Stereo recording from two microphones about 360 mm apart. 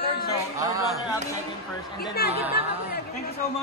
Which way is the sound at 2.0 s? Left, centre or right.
Left.